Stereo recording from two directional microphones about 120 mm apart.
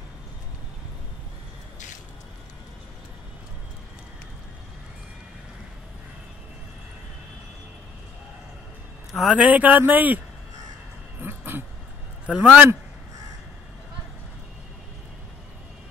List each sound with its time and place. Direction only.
9.1 s a man's voice: centre (ahead or behind)
9.4 s speech: 15° right (ahead or behind)
11.1 s a sound: 15° right (ahead or behind)
12.3 s speech: 10° right (ahead or behind)